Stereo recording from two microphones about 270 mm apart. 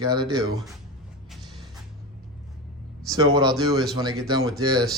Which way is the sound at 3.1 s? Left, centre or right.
Centre.